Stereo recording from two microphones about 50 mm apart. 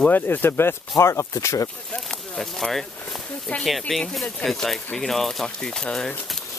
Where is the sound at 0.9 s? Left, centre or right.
Left.